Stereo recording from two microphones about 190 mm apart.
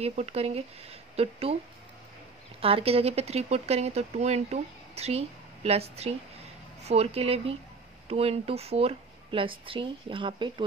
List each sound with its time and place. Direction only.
0.0 s speech: 35° right (ahead or behind)
2.6 s speech: 30° right (ahead or behind)